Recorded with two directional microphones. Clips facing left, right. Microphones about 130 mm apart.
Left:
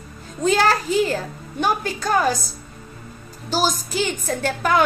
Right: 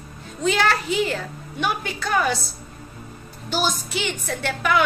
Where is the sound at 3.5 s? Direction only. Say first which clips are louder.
Left 3 dB; 40° left (ahead or behind).